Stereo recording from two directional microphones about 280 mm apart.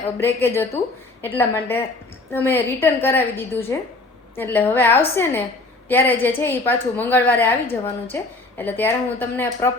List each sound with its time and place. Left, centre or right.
0.2 s a woman's voice: centre